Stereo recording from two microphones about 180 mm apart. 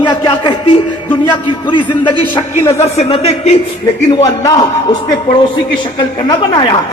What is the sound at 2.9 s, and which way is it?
Speech, 35° left (ahead or behind).